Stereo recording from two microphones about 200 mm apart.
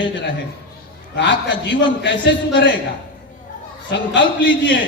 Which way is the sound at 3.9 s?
65° left (ahead or behind).